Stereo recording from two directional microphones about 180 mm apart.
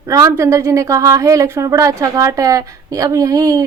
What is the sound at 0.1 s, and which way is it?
A woman's voice, 20° right (ahead or behind).